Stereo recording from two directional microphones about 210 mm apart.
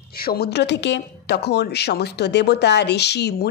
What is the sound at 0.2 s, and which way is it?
A woman's voice, 50° left (ahead or behind).